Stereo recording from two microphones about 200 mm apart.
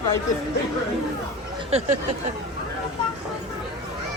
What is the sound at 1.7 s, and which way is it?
Speech, 30° right (ahead or behind).